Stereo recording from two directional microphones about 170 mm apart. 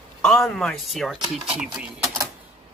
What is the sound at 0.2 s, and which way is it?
Speech, centre (ahead or behind).